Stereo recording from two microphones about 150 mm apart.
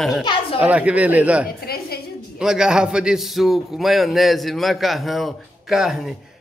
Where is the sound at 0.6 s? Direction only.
10° right (ahead or behind).